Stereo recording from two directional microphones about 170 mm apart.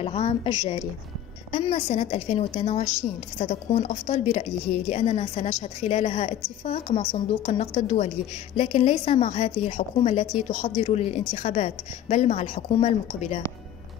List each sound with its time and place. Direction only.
0.0 s a woman's voice: 35° left (ahead or behind)